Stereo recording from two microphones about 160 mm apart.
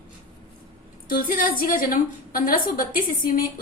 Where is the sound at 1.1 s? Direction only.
65° left (ahead or behind).